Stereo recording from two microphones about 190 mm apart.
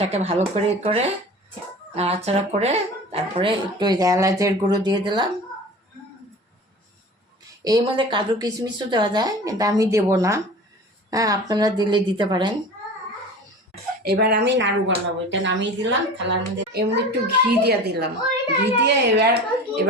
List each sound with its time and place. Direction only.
0.1 s speech: 35° right (ahead or behind)
7.6 s speech: 25° right (ahead or behind)
14.0 s speech: 60° right (ahead or behind)